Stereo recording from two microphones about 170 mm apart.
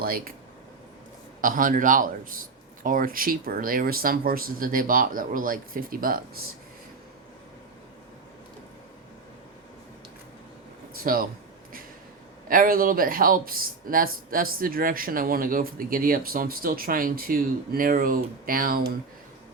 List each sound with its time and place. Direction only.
0.0 s speech: 60° right (ahead or behind)
1.4 s speech: 55° right (ahead or behind)
11.0 s speech: 60° right (ahead or behind)
12.5 s speech: 55° right (ahead or behind)